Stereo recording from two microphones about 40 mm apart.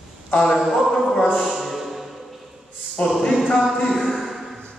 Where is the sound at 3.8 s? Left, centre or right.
Centre.